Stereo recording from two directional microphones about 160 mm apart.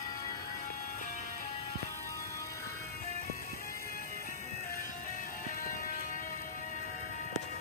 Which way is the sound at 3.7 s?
60° left (ahead or behind).